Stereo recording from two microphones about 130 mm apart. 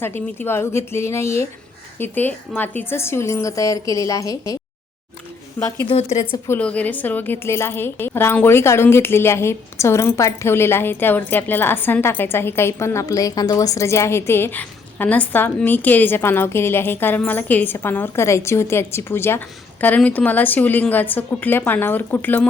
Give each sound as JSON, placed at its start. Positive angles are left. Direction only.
{"t": 0.0, "sound": "a woman's voice", "side_deg": 15}
{"t": 5.5, "sound": "a woman's voice", "side_deg": 20}
{"t": 5.9, "sound": "a woman's voice", "side_deg": 55}
{"t": 6.5, "sound": "a woman's voice", "side_deg": 10}